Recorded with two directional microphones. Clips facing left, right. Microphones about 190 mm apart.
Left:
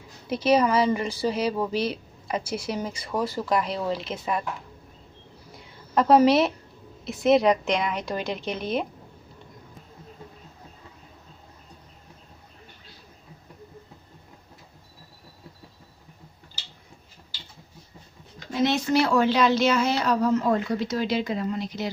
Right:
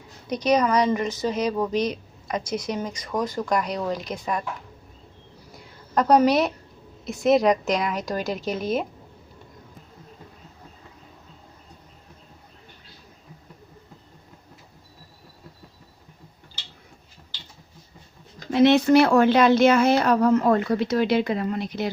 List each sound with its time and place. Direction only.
0.3 s speech: 5° left (ahead or behind)
5.9 s a woman's voice: centre (ahead or behind)
18.5 s speech: 65° right (ahead or behind)